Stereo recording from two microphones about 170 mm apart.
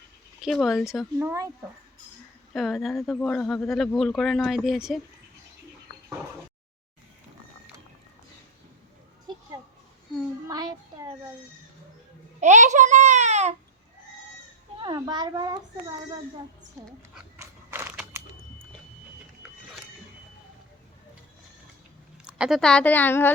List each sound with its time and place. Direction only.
0.4 s speech: centre (ahead or behind)
1.2 s speech: 15° right (ahead or behind)
2.5 s speech: centre (ahead or behind)
10.5 s child singing: 20° right (ahead or behind)
12.4 s a child's voice: 45° right (ahead or behind)
14.8 s a child's voice: 25° right (ahead or behind)
17.3 s a sound: 15° right (ahead or behind)
22.2 s speech: 5° right (ahead or behind); by 23.3 s 10° left (ahead or behind)